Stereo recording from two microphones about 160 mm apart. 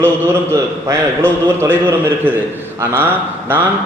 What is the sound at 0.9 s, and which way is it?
Speech, 15° right (ahead or behind).